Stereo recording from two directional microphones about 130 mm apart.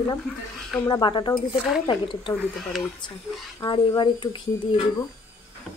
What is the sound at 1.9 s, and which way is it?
Speech, 40° left (ahead or behind).